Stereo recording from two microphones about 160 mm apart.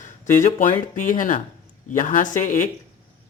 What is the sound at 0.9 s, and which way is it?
Speech, 55° left (ahead or behind).